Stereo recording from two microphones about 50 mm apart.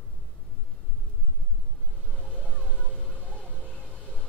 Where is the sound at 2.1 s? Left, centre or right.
Left.